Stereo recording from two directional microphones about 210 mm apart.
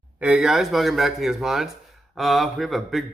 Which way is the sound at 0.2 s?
5° right (ahead or behind).